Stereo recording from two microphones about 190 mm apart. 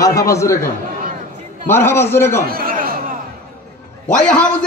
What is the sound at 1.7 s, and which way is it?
Speech, 10° left (ahead or behind).